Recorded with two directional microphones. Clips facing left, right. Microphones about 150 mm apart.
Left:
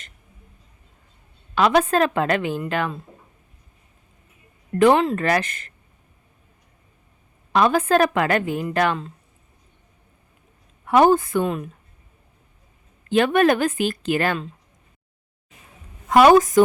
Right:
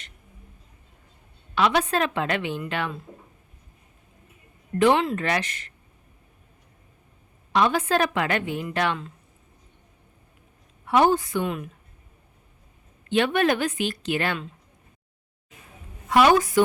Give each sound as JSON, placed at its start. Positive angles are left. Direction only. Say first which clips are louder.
{"t": 1.5, "sound": "a woman's voice", "louder": "left 5 dB", "side_deg": 45}
{"t": 4.8, "sound": "a woman's voice", "louder": "left 4 dB", "side_deg": 45}
{"t": 7.5, "sound": "a woman's voice", "louder": "left 4 dB", "side_deg": 45}
{"t": 10.8, "sound": "a woman's voice", "louder": "left 4 dB", "side_deg": 50}
{"t": 13.1, "sound": "a woman's voice", "louder": "left 4 dB", "side_deg": 45}
{"t": 16.0, "sound": "a woman's voice", "louder": "left 5 dB", "side_deg": 45}